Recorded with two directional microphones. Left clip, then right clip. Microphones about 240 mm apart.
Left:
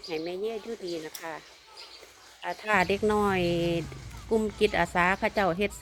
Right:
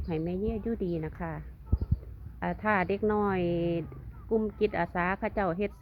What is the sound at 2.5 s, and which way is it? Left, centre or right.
Speech, centre.